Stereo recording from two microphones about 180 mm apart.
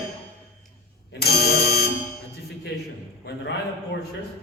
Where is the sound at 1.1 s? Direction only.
60° left (ahead or behind).